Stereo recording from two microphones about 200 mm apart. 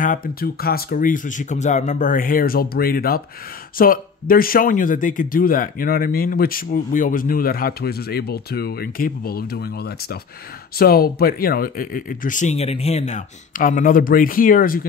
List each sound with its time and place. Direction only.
0.0 s speech: 45° left (ahead or behind)